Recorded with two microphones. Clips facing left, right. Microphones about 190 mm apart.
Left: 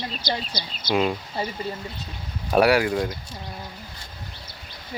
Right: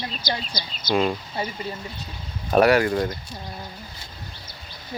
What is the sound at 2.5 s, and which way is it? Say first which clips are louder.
Speech: right 1 dB; 5° left (ahead or behind).